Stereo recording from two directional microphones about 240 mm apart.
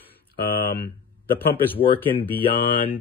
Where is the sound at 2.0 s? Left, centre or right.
Centre.